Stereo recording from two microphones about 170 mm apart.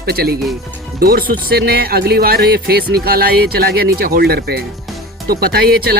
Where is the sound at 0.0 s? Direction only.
65° right (ahead or behind).